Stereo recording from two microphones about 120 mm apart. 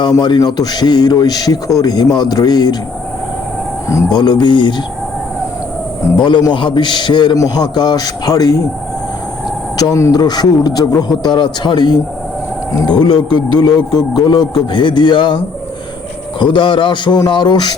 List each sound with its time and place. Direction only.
0.0 s a man's voice: 35° left (ahead or behind)
4.1 s a man's voice: 40° left (ahead or behind)
6.1 s a man's voice: 40° left (ahead or behind)
9.7 s a man's voice: 30° left (ahead or behind)
13.0 s a man's voice: 40° left (ahead or behind)
16.4 s a man's voice: 40° left (ahead or behind)